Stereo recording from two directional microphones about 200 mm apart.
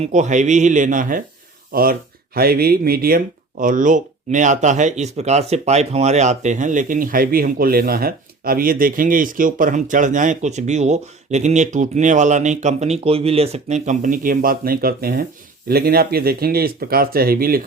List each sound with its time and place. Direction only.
0.0 s speech: 35° right (ahead or behind)